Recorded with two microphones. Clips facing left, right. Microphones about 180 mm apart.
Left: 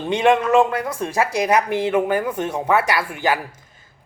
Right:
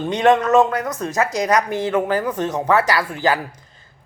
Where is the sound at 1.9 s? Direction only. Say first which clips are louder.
Even; 15° left (ahead or behind).